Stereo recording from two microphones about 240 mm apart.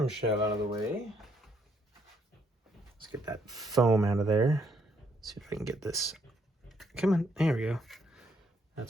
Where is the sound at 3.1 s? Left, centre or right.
Centre.